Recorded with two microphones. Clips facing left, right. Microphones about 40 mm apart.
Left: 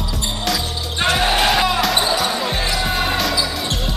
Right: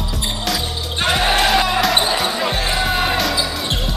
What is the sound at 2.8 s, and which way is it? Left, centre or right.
Basketball bounce, centre.